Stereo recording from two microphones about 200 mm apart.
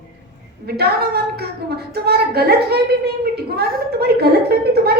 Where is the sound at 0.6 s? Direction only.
55° right (ahead or behind).